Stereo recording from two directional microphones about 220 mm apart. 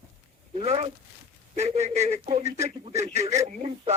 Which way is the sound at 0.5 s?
30° right (ahead or behind).